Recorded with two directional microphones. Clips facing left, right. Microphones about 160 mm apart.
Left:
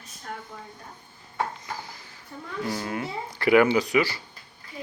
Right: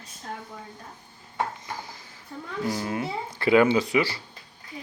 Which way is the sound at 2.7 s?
25° right (ahead or behind).